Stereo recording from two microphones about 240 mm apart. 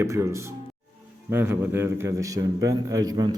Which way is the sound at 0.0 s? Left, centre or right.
Centre.